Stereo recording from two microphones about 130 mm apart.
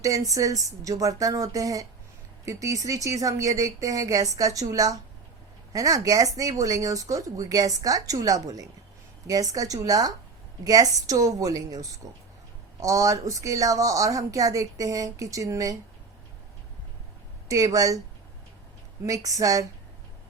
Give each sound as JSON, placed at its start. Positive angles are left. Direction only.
{"t": 0.0, "sound": "speech", "side_deg": -25}
{"t": 17.5, "sound": "speech", "side_deg": -25}
{"t": 19.0, "sound": "speech", "side_deg": -25}